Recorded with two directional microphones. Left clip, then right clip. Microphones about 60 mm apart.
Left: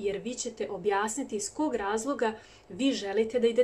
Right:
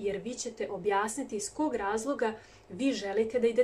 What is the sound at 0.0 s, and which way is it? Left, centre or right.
A woman's voice, left.